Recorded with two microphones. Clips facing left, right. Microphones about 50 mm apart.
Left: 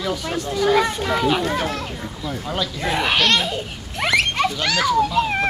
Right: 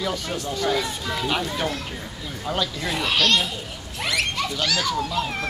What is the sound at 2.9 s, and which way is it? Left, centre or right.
Speech, left.